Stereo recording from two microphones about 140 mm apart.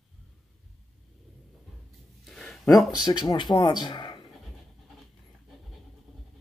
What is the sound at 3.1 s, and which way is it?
Speech, 30° left (ahead or behind).